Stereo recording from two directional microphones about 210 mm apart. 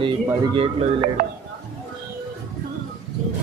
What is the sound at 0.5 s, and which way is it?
Speech, 25° right (ahead or behind).